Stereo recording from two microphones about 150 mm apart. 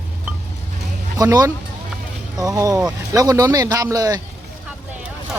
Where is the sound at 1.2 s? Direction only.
20° right (ahead or behind).